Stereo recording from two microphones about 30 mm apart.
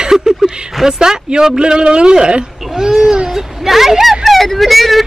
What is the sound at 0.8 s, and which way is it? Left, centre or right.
Speech, right.